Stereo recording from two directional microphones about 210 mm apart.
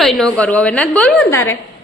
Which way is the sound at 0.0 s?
Centre (ahead or behind).